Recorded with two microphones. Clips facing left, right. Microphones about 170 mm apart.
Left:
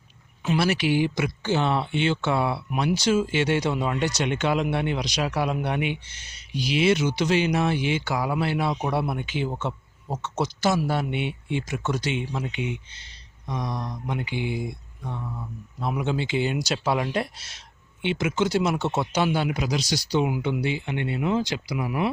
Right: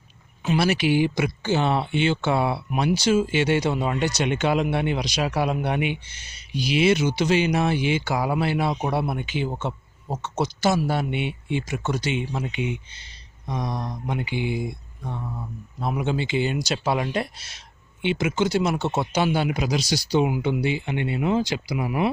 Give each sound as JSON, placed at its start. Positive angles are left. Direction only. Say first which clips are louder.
{"t": 0.4, "sound": "speech", "louder": "right 2 dB", "side_deg": -10}
{"t": 13.7, "sound": "speech", "louder": "right 1 dB", "side_deg": -30}
{"t": 14.1, "sound": "speech", "louder": "right 2 dB", "side_deg": -10}
{"t": 15.2, "sound": "speech", "louder": "right 1 dB", "side_deg": -20}
{"t": 15.9, "sound": "speech", "louder": "right 1 dB", "side_deg": 0}